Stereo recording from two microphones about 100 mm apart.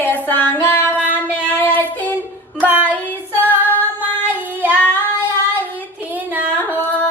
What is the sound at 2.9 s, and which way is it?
Child singing, 20° left (ahead or behind).